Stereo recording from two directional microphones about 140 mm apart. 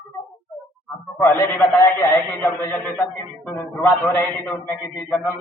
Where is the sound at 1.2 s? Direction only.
15° left (ahead or behind).